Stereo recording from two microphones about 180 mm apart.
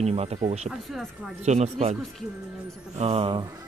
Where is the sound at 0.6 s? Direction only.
Centre (ahead or behind).